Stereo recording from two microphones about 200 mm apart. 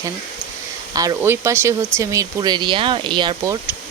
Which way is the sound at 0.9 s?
15° right (ahead or behind).